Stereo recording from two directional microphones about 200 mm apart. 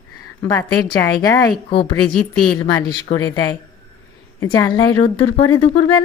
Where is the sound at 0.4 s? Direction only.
20° left (ahead or behind); by 2.6 s 5° left (ahead or behind).